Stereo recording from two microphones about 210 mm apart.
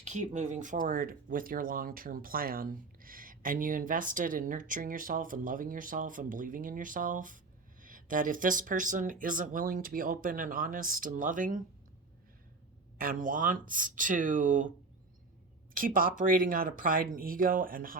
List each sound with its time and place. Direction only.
0.0 s speech: 35° right (ahead or behind)
13.0 s speech: 40° right (ahead or behind)
15.7 s speech: 40° right (ahead or behind)